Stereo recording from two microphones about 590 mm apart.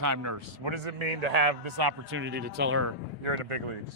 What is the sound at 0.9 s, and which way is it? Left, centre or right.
Speech, right.